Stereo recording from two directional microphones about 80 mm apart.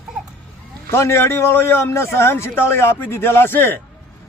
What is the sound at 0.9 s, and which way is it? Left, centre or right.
A man's voice, left.